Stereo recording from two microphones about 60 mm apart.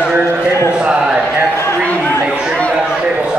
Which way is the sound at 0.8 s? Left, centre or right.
Centre.